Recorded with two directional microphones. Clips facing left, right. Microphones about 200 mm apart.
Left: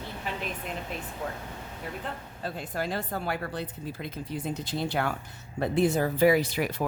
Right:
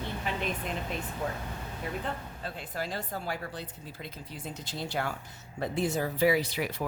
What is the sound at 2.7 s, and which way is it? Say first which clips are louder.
Speech: left 4 dB; 55° left (ahead or behind).